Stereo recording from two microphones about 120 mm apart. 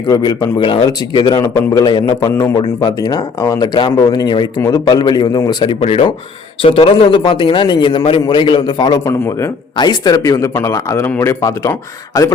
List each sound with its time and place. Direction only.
0.1 s a man's voice: 30° left (ahead or behind)
0.6 s a man's voice: 45° left (ahead or behind)
5.8 s a man's voice: 60° left (ahead or behind); by 12.3 s 30° left (ahead or behind)